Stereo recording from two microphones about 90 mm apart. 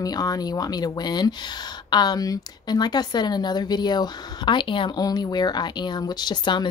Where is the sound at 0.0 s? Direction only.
45° left (ahead or behind).